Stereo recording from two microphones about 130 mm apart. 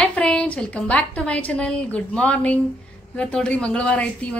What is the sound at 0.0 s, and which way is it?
A woman's voice, 5° left (ahead or behind).